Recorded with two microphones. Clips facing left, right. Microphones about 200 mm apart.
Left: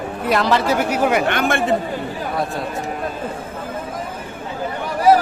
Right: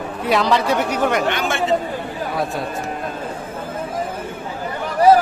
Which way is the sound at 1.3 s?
55° left (ahead or behind).